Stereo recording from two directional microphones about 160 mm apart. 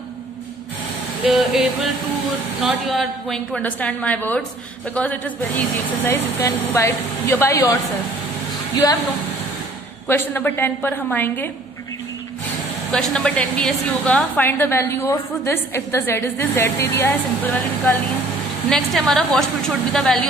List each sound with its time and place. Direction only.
1.2 s a woman's voice: centre (ahead or behind); by 7.7 s 20° left (ahead or behind)
10.0 s a woman's voice: 15° left (ahead or behind)
12.9 s a woman's voice: 5° left (ahead or behind)
18.7 s a woman's voice: 5° left (ahead or behind)